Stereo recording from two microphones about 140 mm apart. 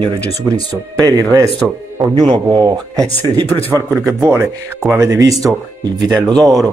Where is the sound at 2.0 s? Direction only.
30° right (ahead or behind).